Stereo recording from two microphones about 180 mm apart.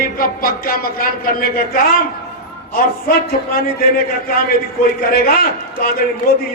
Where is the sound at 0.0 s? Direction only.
55° left (ahead or behind).